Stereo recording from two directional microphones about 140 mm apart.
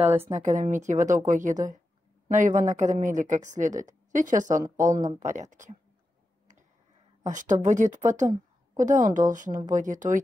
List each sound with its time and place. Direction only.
0.3 s speech: 65° right (ahead or behind)
4.7 s speech: 25° right (ahead or behind)
5.2 s speech: 60° right (ahead or behind)
7.2 s speech: 65° right (ahead or behind)